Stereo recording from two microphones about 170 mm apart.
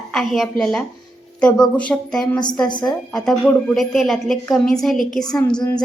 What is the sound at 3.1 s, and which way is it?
A woman's voice, 5° left (ahead or behind).